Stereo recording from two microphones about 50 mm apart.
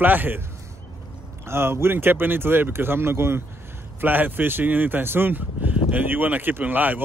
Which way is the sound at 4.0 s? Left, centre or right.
Right.